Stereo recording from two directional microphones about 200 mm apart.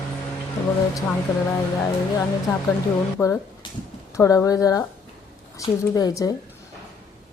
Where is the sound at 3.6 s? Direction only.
25° left (ahead or behind).